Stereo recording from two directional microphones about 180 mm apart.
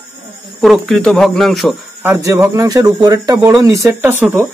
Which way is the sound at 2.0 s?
15° right (ahead or behind).